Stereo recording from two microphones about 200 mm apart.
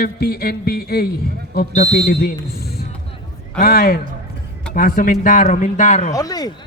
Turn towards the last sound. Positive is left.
turn(degrees=20)  # may be behind; listen again after turning